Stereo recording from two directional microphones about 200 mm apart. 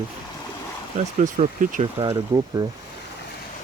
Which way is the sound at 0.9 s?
35° right (ahead or behind).